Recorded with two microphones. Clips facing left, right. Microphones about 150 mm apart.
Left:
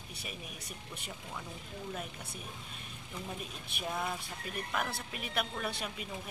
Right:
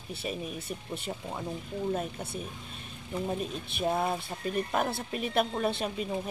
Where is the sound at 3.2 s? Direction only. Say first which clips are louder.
Right 11 dB; 35° right (ahead or behind).